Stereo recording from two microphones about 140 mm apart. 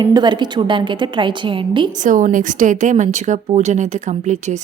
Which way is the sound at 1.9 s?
65° right (ahead or behind).